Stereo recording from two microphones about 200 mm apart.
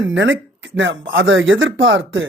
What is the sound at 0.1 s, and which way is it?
Speech, 65° right (ahead or behind).